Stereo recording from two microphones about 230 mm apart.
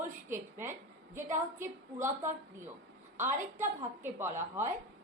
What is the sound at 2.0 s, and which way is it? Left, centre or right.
Speech, right.